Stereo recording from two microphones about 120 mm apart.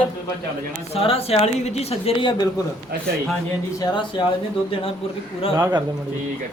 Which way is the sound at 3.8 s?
40° left (ahead or behind).